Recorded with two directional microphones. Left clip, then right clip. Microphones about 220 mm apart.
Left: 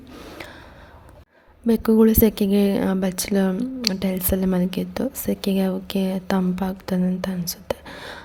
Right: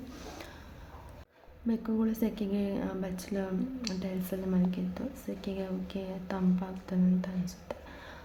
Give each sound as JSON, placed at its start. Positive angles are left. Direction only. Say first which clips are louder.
{"t": 0.1, "sound": "gasp", "louder": "left 8 dB", "side_deg": 35}
{"t": 1.6, "sound": "speech", "louder": "left 16 dB", "side_deg": 45}